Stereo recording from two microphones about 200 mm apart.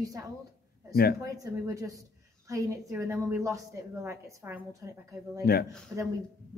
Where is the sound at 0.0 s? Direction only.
15° right (ahead or behind).